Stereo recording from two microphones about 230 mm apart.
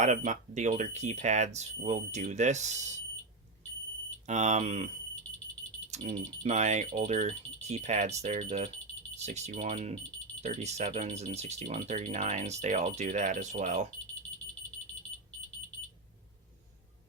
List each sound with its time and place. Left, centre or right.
0.3 s speech: right
4.3 s speech: right
5.9 s speech: right